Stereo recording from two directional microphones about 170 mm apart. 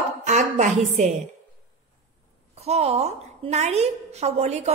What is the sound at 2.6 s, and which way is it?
A woman's voice, 40° right (ahead or behind).